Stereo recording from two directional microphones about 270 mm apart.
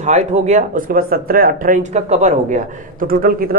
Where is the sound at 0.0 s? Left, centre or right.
Right.